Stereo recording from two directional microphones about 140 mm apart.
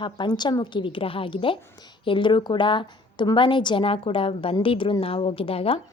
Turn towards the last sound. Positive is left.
turn(degrees=40)  # may be behind; listen again after turning